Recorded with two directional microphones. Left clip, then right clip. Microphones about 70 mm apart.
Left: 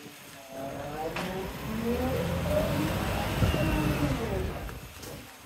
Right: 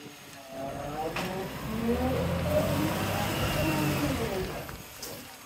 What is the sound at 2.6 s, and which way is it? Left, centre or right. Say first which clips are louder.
Vehicle: right 1 dB; right.